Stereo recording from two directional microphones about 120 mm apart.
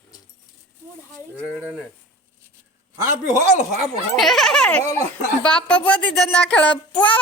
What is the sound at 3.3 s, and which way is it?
Speech, 90° right.